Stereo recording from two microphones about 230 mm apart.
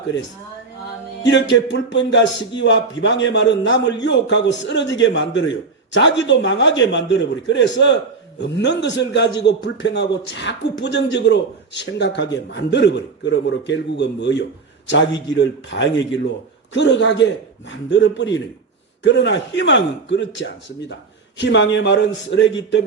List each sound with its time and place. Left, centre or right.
1.2 s speech: left